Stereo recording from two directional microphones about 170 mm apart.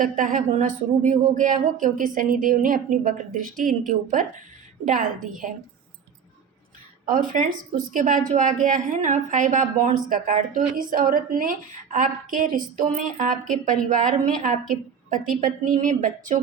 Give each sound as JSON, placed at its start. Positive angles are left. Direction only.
{"t": 0.0, "sound": "a woman's voice", "side_deg": -50}
{"t": 7.0, "sound": "a woman's voice", "side_deg": -50}